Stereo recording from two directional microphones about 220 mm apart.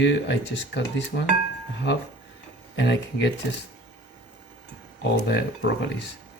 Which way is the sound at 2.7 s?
55° left (ahead or behind).